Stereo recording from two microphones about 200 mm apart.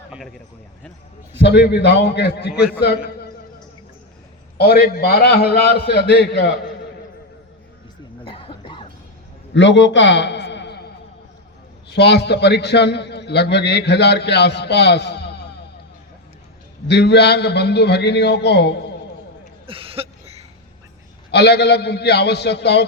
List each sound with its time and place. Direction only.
0.1 s speech: centre (ahead or behind)
1.3 s a man's voice: 60° left (ahead or behind)
2.5 s a man's voice: 5° right (ahead or behind)
4.5 s a man's voice: 50° left (ahead or behind)
8.2 s cough: 25° left (ahead or behind)
9.6 s a sound: 65° left (ahead or behind)
11.9 s a man's voice: 55° left (ahead or behind)
16.9 s a man's voice: 55° left (ahead or behind)
19.6 s a sound: 25° right (ahead or behind)
21.2 s a man's voice: 55° left (ahead or behind)